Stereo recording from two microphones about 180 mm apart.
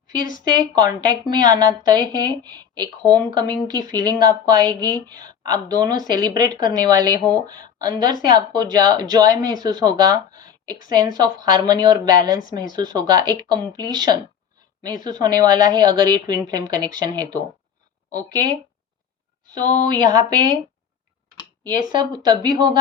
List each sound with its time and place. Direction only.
0.3 s speech: 20° right (ahead or behind)
18.3 s speech: 20° right (ahead or behind)
21.9 s speech: 20° right (ahead or behind)